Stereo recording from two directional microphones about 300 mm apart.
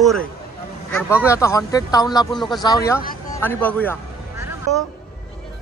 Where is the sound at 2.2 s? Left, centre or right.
Centre.